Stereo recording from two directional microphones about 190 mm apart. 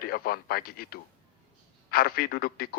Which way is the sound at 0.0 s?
50° left (ahead or behind).